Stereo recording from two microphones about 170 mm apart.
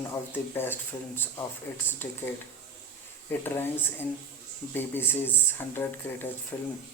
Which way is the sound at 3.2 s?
15° left (ahead or behind).